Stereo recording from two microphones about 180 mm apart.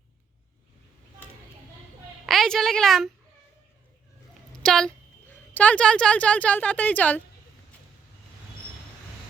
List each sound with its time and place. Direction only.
2.2 s a woman's voice: centre (ahead or behind)
4.6 s a woman's voice: 5° left (ahead or behind)